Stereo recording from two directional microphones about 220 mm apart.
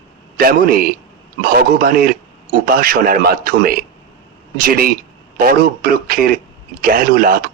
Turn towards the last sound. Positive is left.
turn(degrees=-40)  # may be behind; listen again after turning